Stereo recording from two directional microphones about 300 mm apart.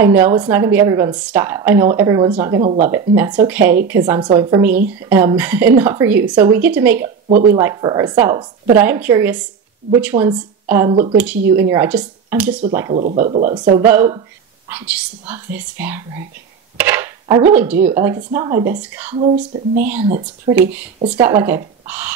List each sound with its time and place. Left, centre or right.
0.0 s a woman's voice: centre
2.6 s speech: right
3.2 s a woman's voice: centre
7.2 s speech: right
7.5 s a woman's voice: centre
13.4 s a woman's voice: right; by 19.1 s centre
19.1 s speech: right
20.5 s a woman's voice: centre